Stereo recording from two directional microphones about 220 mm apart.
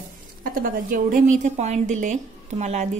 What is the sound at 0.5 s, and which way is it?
A woman's voice, 40° right (ahead or behind).